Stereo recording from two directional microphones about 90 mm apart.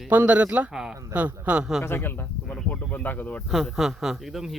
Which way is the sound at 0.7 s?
5° right (ahead or behind).